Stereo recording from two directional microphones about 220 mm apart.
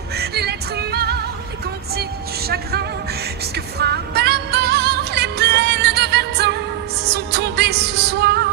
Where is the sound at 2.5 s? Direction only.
45° right (ahead or behind).